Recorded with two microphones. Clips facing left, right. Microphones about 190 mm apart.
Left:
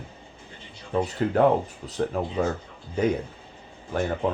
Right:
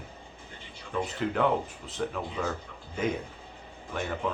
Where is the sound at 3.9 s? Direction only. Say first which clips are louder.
Left 7 dB; 40° left (ahead or behind).